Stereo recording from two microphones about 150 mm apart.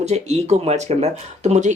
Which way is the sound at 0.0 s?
50° right (ahead or behind).